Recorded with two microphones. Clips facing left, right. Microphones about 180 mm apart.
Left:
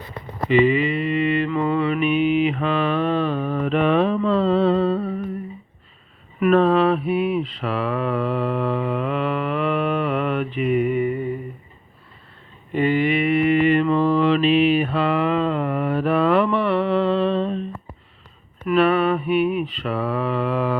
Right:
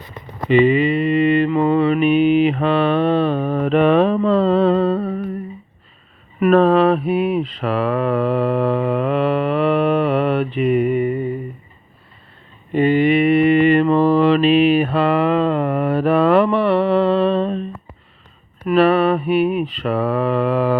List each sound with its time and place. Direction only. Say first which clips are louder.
1.1 s mantra: right 6 dB; 30° right (ahead or behind)
3.4 s mantra: right 5 dB; 55° right (ahead or behind)
3.8 s mantra: right 3 dB; 45° right (ahead or behind)
6.4 s mantra: right 3 dB; 45° right (ahead or behind)
9.2 s mantra: right 5 dB; 35° right (ahead or behind)
12.7 s a sound: right 5 dB; 25° right (ahead or behind)
13.6 s mantra: right 4 dB; 75° right (ahead or behind)
13.8 s mantra: right 4 dB; 35° right (ahead or behind)
14.3 s mantra: right 3 dB; 50° right (ahead or behind)
18.6 s a sound: right 4 dB; 35° right (ahead or behind)
19.8 s mantra: right 7 dB; 45° right (ahead or behind)